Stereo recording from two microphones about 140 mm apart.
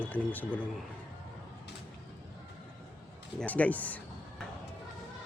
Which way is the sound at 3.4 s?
10° left (ahead or behind).